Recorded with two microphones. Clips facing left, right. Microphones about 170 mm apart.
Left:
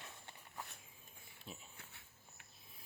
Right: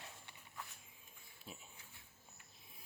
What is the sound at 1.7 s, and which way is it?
Insect, 65° left (ahead or behind).